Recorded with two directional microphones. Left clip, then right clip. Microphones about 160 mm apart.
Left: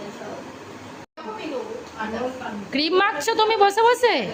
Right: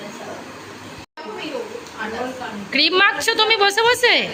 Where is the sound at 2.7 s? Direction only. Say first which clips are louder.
Right 5 dB; 20° left (ahead or behind).